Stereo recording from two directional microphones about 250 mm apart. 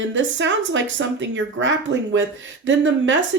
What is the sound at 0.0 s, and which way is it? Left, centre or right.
Speech, right.